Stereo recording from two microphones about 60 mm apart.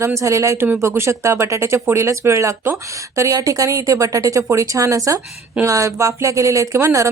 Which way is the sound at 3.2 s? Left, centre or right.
Right.